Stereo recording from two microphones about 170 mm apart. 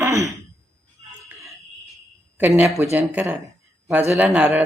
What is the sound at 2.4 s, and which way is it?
Speech, 15° right (ahead or behind).